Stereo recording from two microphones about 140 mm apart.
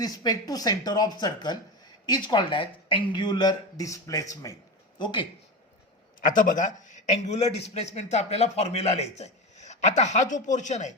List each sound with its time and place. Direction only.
0.0 s speech: 25° left (ahead or behind)
6.2 s a man's voice: 70° left (ahead or behind)